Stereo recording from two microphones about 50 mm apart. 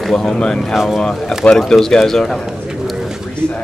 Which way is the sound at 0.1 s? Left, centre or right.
Centre.